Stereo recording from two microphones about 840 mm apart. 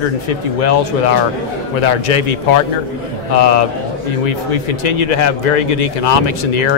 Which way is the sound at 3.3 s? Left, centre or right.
Left.